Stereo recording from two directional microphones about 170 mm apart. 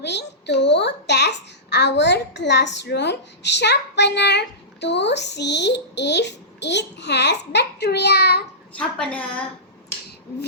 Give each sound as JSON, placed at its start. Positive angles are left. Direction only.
{"t": 0.0, "sound": "a child's voice", "side_deg": 90}
{"t": 8.8, "sound": "a woman's voice", "side_deg": 5}